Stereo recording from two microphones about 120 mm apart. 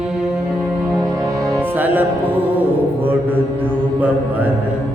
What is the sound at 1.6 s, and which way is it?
Music, 15° right (ahead or behind).